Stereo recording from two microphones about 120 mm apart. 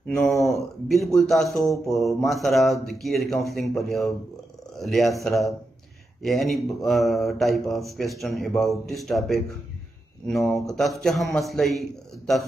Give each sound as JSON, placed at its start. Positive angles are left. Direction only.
{"t": 0.5, "sound": "speech", "side_deg": 0}